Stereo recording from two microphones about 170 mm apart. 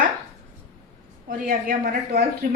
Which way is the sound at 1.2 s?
55° right (ahead or behind).